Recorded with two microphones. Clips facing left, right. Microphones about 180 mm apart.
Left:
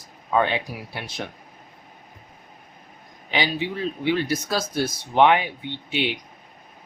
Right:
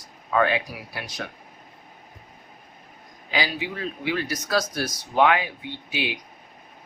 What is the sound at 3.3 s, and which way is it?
Speech, 25° left (ahead or behind).